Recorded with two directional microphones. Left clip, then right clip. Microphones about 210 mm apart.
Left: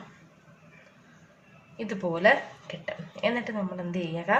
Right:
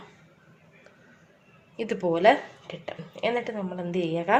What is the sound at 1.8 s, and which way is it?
Speech, 35° right (ahead or behind).